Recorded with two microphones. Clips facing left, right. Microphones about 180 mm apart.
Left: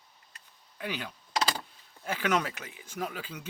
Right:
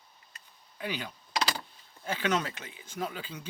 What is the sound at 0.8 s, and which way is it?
Speech, 35° right (ahead or behind).